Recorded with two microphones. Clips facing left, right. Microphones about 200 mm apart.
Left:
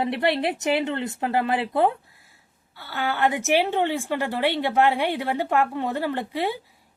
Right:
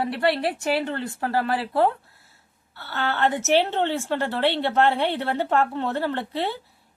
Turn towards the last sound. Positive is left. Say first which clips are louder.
# left 1 dB
turn(degrees=10)  # may be behind; listen again after turning